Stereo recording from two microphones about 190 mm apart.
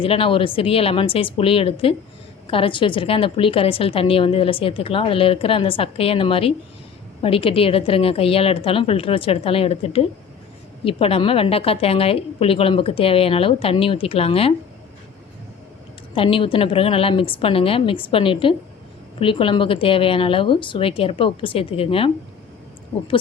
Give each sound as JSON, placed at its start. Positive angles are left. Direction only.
{"t": 0.0, "sound": "a woman's voice", "side_deg": 30}
{"t": 16.1, "sound": "a woman's voice", "side_deg": 30}